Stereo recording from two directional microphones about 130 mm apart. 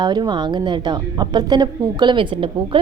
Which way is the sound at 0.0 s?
35° right (ahead or behind).